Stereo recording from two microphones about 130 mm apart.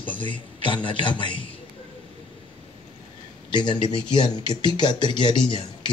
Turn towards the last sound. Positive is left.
turn(degrees=35)  # may be behind; listen again after turning